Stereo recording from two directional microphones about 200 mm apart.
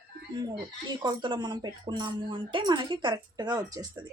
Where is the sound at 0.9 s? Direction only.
20° right (ahead or behind).